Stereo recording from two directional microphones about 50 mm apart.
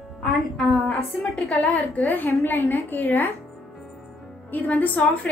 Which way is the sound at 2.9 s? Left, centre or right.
Left.